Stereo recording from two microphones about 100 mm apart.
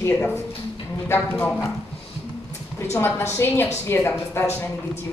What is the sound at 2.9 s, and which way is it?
Speech, 25° left (ahead or behind).